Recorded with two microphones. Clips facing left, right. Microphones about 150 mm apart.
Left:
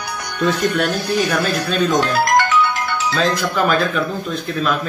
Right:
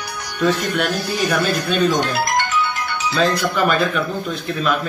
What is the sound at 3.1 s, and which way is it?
A man's voice, centre (ahead or behind).